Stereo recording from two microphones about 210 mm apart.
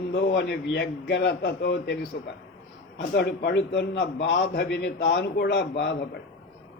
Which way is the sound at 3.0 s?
50° left (ahead or behind).